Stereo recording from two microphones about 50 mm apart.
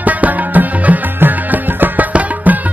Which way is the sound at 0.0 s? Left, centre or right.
Right.